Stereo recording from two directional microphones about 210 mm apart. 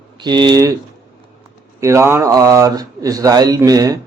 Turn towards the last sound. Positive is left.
turn(degrees=-15)  # may be behind; listen again after turning